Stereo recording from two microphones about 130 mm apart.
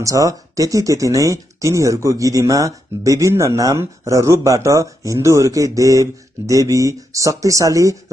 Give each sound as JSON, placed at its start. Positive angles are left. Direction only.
{"t": 0.0, "sound": "speech", "side_deg": -25}